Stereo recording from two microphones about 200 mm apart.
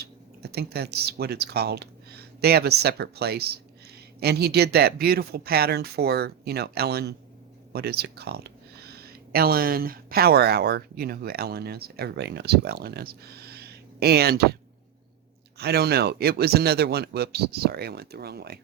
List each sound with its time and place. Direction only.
0.0 s speech: 55° right (ahead or behind)
15.5 s speech: 50° right (ahead or behind)